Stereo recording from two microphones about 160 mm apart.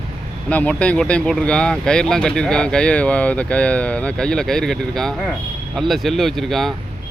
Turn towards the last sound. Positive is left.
turn(degrees=0)  # may be behind; listen again after turning